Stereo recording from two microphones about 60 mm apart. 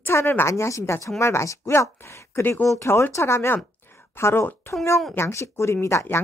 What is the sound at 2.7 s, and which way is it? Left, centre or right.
Speech, left.